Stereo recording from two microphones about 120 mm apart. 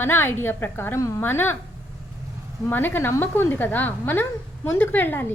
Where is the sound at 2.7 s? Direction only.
15° left (ahead or behind).